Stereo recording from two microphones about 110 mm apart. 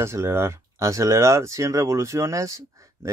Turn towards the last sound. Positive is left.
turn(degrees=-30)  # may be behind; listen again after turning